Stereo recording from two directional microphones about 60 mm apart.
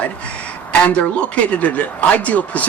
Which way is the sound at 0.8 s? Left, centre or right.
Centre.